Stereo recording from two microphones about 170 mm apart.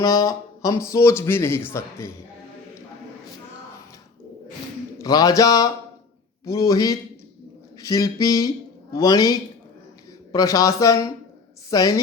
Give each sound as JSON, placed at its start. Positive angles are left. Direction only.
{"t": 0.0, "sound": "speech", "side_deg": 20}
{"t": 5.0, "sound": "mantra", "side_deg": 20}
{"t": 10.3, "sound": "mantra", "side_deg": 20}